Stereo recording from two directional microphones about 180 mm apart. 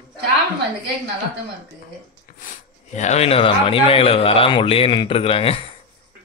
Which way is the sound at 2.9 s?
40° left (ahead or behind).